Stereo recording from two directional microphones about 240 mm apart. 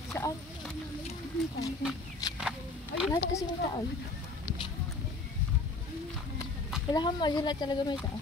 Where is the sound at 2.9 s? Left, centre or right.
Left.